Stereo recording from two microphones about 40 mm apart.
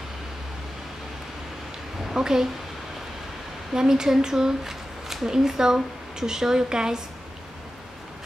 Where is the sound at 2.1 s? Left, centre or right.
Centre.